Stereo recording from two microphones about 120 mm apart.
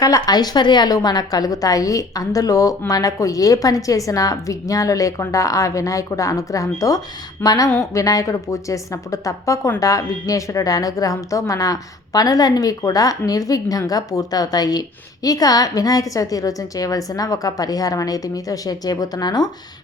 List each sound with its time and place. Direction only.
0.0 s a woman's voice: 30° left (ahead or behind)